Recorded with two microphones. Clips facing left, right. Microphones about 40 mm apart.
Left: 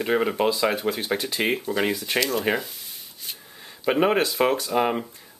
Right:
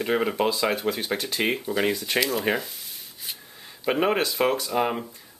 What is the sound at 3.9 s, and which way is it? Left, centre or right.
Speech, centre.